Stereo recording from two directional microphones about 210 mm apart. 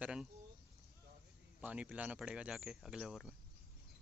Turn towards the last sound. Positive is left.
turn(degrees=-5)  # may be behind; listen again after turning